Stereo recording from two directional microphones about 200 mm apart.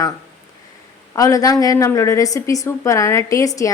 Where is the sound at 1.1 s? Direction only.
15° left (ahead or behind).